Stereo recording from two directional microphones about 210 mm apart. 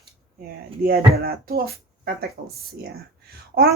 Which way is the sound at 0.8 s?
45° right (ahead or behind).